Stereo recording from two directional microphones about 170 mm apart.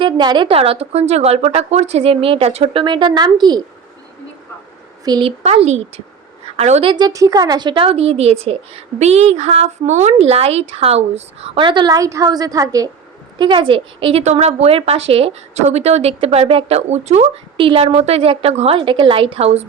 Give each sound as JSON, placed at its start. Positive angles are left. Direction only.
{"t": 0.0, "sound": "a woman's voice", "side_deg": -25}
{"t": 5.0, "sound": "speech", "side_deg": -25}
{"t": 5.4, "sound": "a woman's voice", "side_deg": -40}
{"t": 6.9, "sound": "a woman's voice", "side_deg": -20}